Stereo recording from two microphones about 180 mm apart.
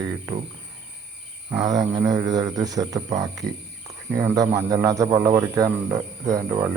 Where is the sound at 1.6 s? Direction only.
20° right (ahead or behind).